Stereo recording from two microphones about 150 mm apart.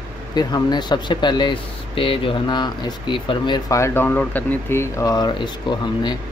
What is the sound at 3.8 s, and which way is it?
A man's voice, 15° left (ahead or behind).